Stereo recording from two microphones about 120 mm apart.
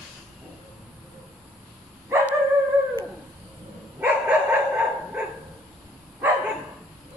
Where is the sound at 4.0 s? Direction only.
15° right (ahead or behind).